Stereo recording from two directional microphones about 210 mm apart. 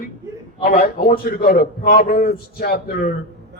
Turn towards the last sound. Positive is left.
turn(degrees=45)  # may be behind; listen again after turning